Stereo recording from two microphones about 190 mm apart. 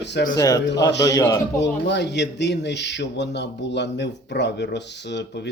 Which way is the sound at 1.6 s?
65° left (ahead or behind).